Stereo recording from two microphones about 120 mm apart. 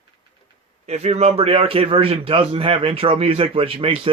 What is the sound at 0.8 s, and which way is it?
Speech, 65° right (ahead or behind).